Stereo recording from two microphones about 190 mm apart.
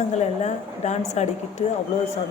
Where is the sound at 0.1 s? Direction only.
35° left (ahead or behind).